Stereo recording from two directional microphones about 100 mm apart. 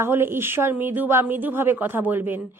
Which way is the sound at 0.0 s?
25° right (ahead or behind).